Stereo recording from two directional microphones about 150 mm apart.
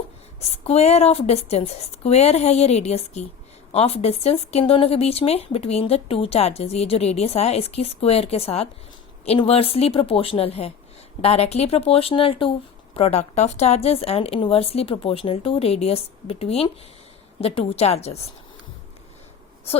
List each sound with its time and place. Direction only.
0.3 s a woman's voice: 45° left (ahead or behind)